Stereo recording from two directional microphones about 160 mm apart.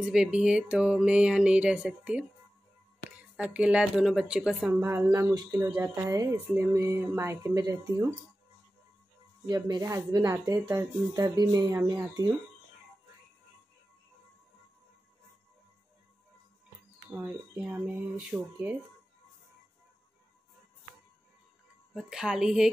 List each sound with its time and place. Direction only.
0.0 s speech: 5° right (ahead or behind)
3.3 s speech: 10° right (ahead or behind)
9.5 s a woman's voice: 20° right (ahead or behind)
17.1 s speech: 10° right (ahead or behind)
21.9 s a woman's voice: 5° right (ahead or behind)